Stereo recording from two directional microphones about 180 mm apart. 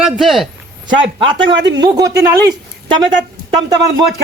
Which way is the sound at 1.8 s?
20° right (ahead or behind).